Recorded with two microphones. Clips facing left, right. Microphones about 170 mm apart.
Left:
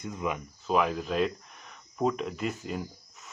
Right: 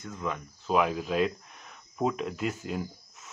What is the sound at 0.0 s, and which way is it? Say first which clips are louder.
Speech: left 2 dB; 15° left (ahead or behind).